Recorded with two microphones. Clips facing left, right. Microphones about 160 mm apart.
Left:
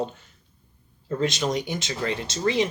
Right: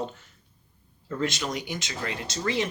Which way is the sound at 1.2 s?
20° left (ahead or behind).